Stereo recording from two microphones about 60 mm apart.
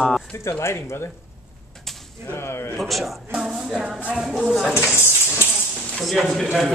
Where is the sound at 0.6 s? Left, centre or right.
Left.